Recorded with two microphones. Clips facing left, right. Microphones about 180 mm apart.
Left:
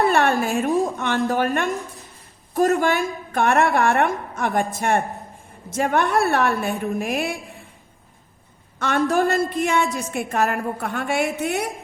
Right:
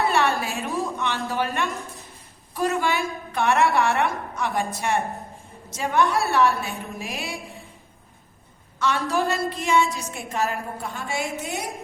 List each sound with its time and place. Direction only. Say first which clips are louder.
0.0 s a sound: left 4 dB; 55° left (ahead or behind)
0.9 s a woman's voice: left 5 dB; 55° left (ahead or behind)
8.8 s a woman's voice: left 4 dB; 55° left (ahead or behind)